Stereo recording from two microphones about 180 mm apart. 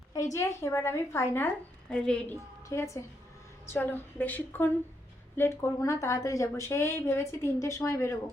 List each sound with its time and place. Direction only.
0.3 s a woman's voice: 15° left (ahead or behind)
2.6 s speech: 15° left (ahead or behind)